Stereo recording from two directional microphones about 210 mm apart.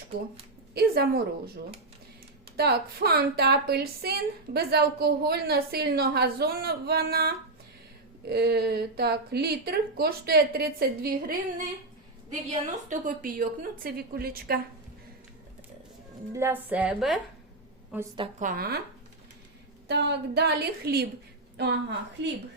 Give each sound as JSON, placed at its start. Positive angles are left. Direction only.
{"t": 0.7, "sound": "a woman's voice", "side_deg": -50}
{"t": 2.6, "sound": "a woman's voice", "side_deg": -50}
{"t": 12.6, "sound": "a woman's voice", "side_deg": -40}
{"t": 16.3, "sound": "a woman's voice", "side_deg": -10}
{"t": 18.3, "sound": "a woman's voice", "side_deg": -40}
{"t": 19.9, "sound": "a woman's voice", "side_deg": -50}